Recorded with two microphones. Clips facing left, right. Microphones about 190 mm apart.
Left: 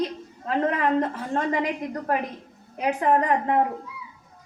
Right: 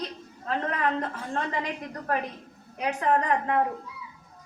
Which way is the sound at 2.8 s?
30° left (ahead or behind).